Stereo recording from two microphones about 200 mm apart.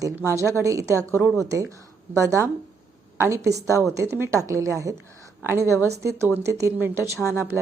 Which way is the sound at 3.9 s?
15° right (ahead or behind).